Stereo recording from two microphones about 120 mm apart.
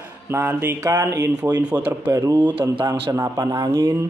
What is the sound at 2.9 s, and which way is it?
Mantra, 25° right (ahead or behind).